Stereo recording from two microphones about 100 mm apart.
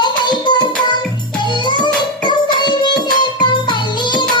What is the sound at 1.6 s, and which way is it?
Music, 50° left (ahead or behind).